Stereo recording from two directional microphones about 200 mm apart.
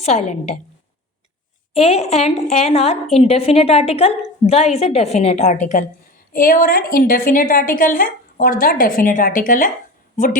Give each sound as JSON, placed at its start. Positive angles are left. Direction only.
{"t": 0.0, "sound": "a woman's voice", "side_deg": 35}
{"t": 1.8, "sound": "a woman's voice", "side_deg": 30}